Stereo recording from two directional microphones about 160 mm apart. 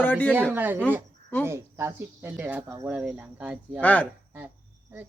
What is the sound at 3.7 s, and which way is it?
Speech, 10° left (ahead or behind).